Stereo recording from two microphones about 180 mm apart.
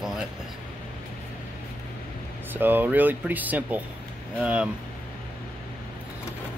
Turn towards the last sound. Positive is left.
turn(degrees=-5)  # may be behind; listen again after turning